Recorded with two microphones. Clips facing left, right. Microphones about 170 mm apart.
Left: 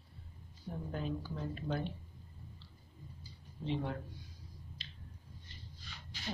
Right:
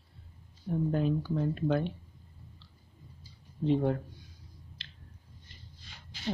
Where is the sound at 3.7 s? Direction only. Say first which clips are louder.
Right 10 dB; 45° right (ahead or behind).